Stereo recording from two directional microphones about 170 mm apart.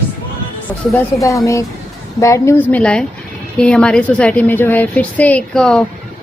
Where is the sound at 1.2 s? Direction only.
20° left (ahead or behind).